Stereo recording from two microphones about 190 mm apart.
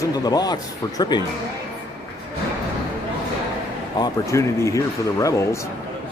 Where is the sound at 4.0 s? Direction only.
15° left (ahead or behind).